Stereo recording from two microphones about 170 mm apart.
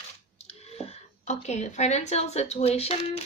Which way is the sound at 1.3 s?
45° left (ahead or behind).